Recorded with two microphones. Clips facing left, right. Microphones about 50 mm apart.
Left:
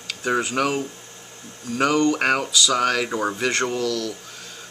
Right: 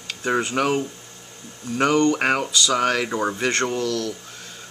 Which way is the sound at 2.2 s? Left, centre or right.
Centre.